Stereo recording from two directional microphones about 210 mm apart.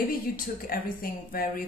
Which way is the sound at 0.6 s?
45° left (ahead or behind).